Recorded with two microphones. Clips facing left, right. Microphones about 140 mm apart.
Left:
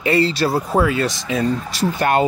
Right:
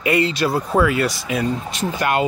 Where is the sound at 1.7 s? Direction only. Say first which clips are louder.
Left 3 dB; 35° left (ahead or behind).